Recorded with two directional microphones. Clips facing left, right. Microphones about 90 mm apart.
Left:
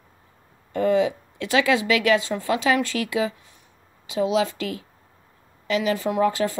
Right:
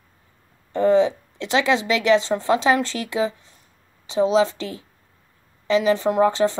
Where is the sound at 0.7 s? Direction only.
30° right (ahead or behind).